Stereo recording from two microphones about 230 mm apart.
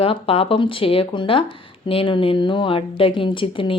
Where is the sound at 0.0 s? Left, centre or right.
Left.